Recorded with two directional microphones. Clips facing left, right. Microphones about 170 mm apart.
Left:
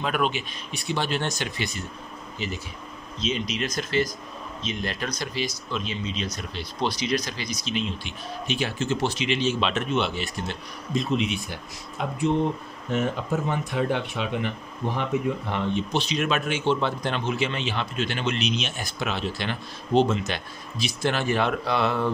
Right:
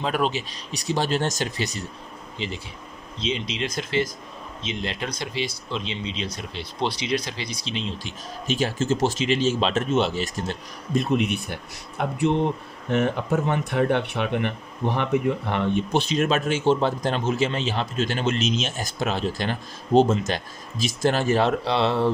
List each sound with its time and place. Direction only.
0.0 s speech: 30° right (ahead or behind)
2.3 s speech: 25° right (ahead or behind)
8.5 s speech: 45° right (ahead or behind)